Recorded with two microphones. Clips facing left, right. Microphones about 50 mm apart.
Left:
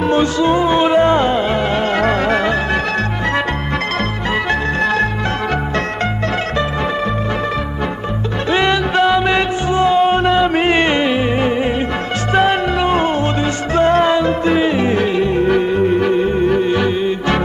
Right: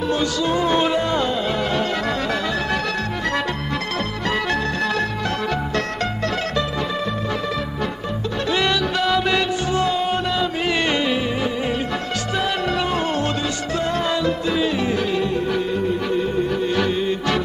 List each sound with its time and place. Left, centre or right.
0.1 s music: left
8.5 s music: left
12.7 s music: left
16.6 s music: left